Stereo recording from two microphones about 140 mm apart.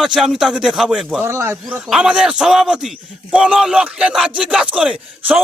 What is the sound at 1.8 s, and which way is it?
A man's voice, 5° right (ahead or behind).